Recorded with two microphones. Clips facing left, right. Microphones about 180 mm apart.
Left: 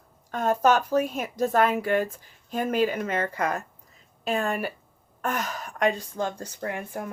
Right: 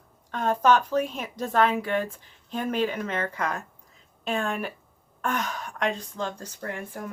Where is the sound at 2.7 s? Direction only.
5° left (ahead or behind).